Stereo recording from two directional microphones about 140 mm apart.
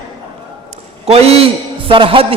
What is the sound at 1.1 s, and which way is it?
A man's voice, 45° right (ahead or behind).